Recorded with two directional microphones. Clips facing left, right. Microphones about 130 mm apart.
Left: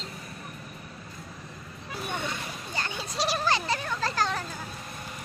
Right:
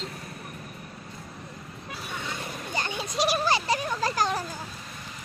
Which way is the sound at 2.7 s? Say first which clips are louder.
Right 4 dB; 15° right (ahead or behind).